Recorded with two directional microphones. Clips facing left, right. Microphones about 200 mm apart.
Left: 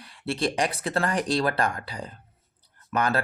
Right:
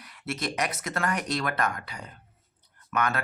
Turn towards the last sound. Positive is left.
turn(degrees=30)  # may be behind; listen again after turning